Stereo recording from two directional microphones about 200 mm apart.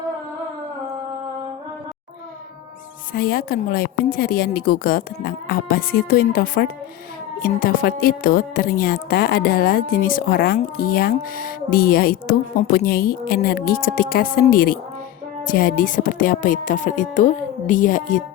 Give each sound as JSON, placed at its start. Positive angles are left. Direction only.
{"t": 3.1, "sound": "speech", "side_deg": 50}